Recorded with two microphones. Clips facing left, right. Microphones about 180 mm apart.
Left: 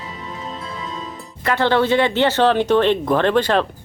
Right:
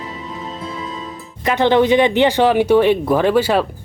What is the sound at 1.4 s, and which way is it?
Speech, 15° right (ahead or behind).